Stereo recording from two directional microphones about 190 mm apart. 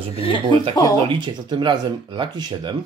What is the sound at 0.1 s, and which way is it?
Chuckle, 30° left (ahead or behind).